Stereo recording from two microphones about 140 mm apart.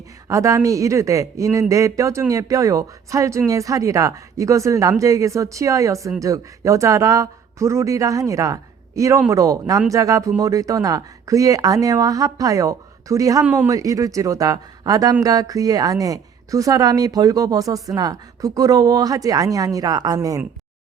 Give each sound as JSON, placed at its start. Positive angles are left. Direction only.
{"t": 0.3, "sound": "a woman's voice", "side_deg": -20}
{"t": 13.4, "sound": "a man's voice", "side_deg": -10}
{"t": 13.7, "sound": "a woman's voice", "side_deg": -25}